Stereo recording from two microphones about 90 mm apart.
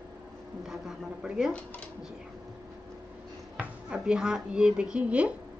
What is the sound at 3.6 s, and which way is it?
A woman's voice, 10° right (ahead or behind).